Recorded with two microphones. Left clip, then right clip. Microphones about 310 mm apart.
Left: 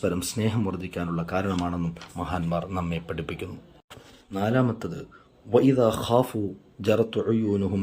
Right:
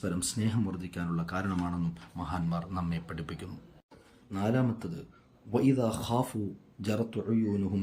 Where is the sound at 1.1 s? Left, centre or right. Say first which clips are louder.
Left 7 dB; left.